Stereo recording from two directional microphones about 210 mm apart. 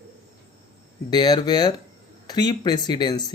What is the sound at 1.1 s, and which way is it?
Speech, 20° left (ahead or behind).